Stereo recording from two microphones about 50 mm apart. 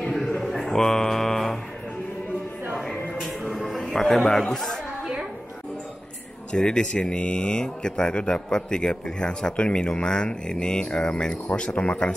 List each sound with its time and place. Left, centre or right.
0.0 s a sound: centre
2.8 s music: centre
4.2 s speech: centre
6.5 s speech: centre